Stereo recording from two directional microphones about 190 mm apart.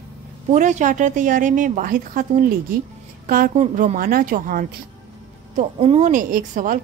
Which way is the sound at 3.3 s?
50° right (ahead or behind).